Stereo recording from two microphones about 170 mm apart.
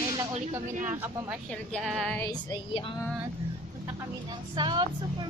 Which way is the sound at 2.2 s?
25° left (ahead or behind).